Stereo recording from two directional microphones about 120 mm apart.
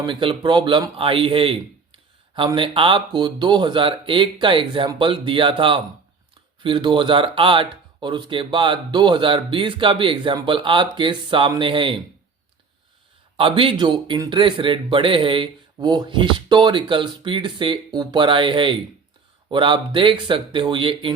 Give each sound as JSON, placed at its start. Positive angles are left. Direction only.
{"t": 0.0, "sound": "a man's voice", "side_deg": -45}
{"t": 13.3, "sound": "speech", "side_deg": -50}